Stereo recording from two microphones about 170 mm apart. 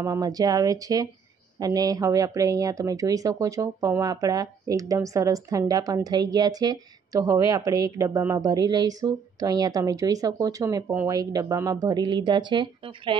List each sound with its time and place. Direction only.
0.0 s speech: 20° right (ahead or behind)